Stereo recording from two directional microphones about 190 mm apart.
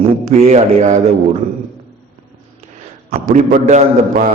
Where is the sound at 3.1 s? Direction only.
45° right (ahead or behind).